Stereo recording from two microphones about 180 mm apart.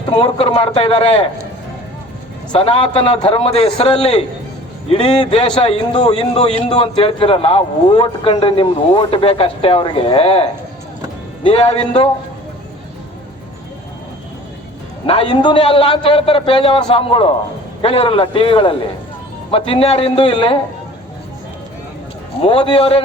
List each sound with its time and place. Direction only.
0.2 s a man's voice: 30° left (ahead or behind)
2.5 s a man's voice: 30° left (ahead or behind)
15.0 s a man's voice: 30° left (ahead or behind)
22.4 s a man's voice: 30° left (ahead or behind)